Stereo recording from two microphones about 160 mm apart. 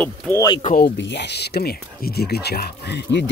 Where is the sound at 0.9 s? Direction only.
90° left.